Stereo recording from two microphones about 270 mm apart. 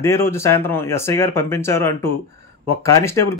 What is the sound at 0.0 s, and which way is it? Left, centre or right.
Speech, centre.